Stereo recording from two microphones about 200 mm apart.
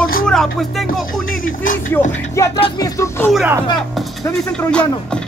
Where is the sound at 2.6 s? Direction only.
20° left (ahead or behind).